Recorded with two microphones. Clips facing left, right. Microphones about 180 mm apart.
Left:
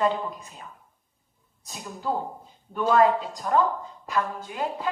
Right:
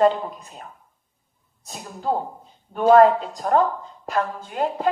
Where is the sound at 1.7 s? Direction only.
50° right (ahead or behind).